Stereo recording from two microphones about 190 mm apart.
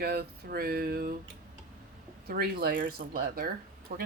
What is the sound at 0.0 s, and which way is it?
Speech, 55° right (ahead or behind).